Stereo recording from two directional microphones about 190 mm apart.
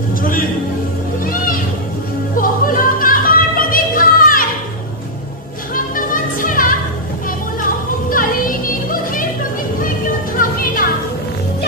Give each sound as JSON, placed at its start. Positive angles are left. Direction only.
{"t": 0.2, "sound": "music", "side_deg": 45}
{"t": 2.3, "sound": "music", "side_deg": 45}
{"t": 5.9, "sound": "music", "side_deg": 45}
{"t": 8.1, "sound": "music", "side_deg": 45}
{"t": 10.3, "sound": "music", "side_deg": 45}